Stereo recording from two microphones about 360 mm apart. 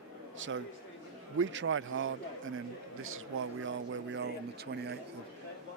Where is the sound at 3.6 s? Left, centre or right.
Right.